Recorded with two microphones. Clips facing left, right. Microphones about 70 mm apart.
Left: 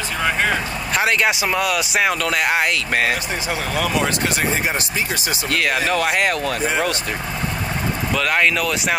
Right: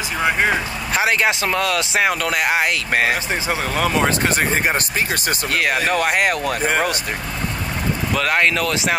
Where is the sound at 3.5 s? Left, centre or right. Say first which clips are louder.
Right 1 dB; right.